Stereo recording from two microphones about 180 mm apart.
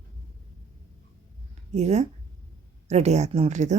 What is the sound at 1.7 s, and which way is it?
Speech, 40° right (ahead or behind).